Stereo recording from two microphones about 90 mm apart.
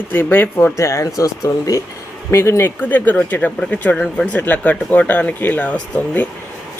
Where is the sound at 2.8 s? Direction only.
20° left (ahead or behind).